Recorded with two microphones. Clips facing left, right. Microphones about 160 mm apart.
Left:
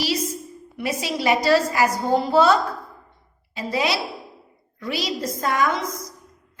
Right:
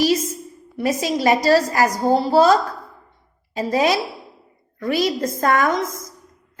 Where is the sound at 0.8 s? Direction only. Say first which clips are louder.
Right 5 dB; 45° right (ahead or behind).